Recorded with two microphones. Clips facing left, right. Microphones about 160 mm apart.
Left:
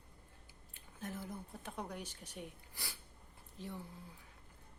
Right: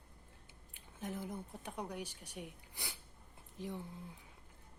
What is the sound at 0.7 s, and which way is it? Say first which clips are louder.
A woman's voice: right 2 dB; 15° right (ahead or behind).